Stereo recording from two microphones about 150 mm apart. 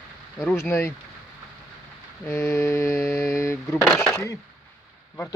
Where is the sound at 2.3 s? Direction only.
20° left (ahead or behind).